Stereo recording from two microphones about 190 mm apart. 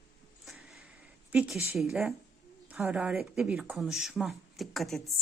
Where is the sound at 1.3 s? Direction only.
Centre (ahead or behind).